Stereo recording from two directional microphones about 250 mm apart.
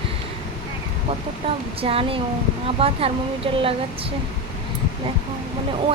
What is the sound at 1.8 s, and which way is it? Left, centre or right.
Speech, right.